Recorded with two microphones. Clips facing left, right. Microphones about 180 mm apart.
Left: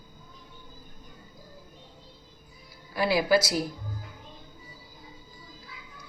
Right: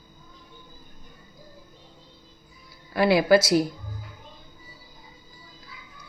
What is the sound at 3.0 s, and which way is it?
Speech, 60° right (ahead or behind).